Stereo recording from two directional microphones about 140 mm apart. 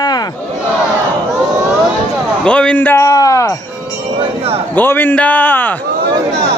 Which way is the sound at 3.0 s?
25° left (ahead or behind).